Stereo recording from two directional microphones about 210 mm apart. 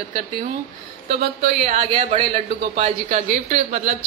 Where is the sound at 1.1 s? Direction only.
30° right (ahead or behind).